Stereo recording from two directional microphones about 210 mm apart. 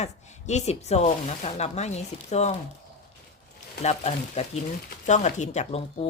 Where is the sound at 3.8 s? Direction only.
30° left (ahead or behind).